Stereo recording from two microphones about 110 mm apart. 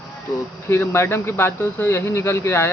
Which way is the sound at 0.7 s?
20° left (ahead or behind).